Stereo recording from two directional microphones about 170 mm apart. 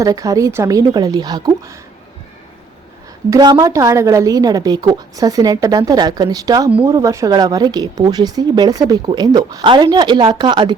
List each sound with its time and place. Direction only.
0.0 s speech: 20° right (ahead or behind)
3.2 s speech: 25° right (ahead or behind)
6.7 s speech: 10° right (ahead or behind)
6.9 s speech: 20° right (ahead or behind)